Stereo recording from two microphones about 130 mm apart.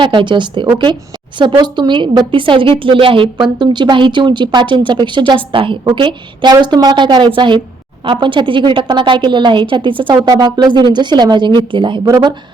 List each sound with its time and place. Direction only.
0.0 s a woman's voice: 35° right (ahead or behind)